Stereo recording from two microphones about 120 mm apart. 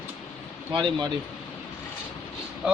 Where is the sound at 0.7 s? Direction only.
40° right (ahead or behind).